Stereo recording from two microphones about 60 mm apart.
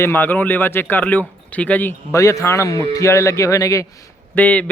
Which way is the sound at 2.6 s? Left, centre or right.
Left.